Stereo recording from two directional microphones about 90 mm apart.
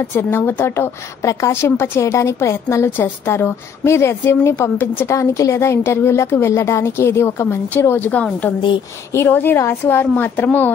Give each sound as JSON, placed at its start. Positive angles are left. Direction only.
{"t": 0.1, "sound": "a woman's voice", "side_deg": 25}
{"t": 5.1, "sound": "a woman's voice", "side_deg": 35}
{"t": 8.1, "sound": "a woman's voice", "side_deg": 15}